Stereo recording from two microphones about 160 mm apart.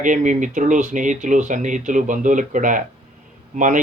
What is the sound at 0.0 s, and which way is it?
Speech, 50° right (ahead or behind).